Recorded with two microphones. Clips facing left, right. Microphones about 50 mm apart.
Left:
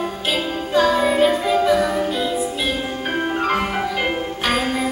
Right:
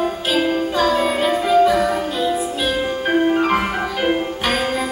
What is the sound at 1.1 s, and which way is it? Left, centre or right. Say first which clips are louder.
Music: right 1 dB; centre.